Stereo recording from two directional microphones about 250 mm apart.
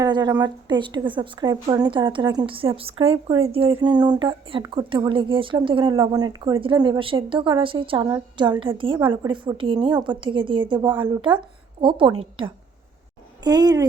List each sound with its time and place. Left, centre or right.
0.0 s a woman's voice: centre
13.4 s speech: centre